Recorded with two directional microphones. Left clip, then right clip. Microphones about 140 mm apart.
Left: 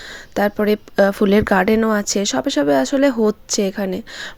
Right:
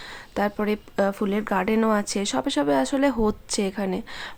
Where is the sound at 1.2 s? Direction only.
45° left (ahead or behind).